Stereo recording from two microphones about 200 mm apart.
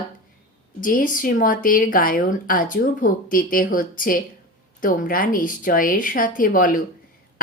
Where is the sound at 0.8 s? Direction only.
40° left (ahead or behind).